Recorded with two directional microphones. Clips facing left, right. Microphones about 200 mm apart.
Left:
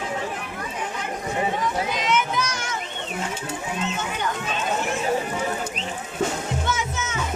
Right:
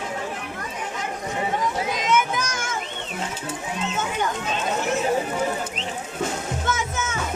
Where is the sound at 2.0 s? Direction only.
50° right (ahead or behind).